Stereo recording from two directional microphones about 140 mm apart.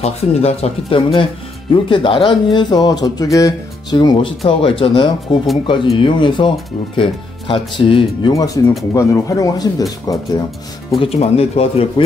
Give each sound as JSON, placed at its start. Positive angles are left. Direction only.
{"t": 0.0, "sound": "speech", "side_deg": 45}
{"t": 8.3, "sound": "speech", "side_deg": 25}
{"t": 11.0, "sound": "speech", "side_deg": 45}